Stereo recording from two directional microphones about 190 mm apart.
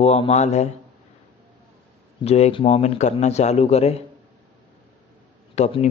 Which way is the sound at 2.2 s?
30° left (ahead or behind).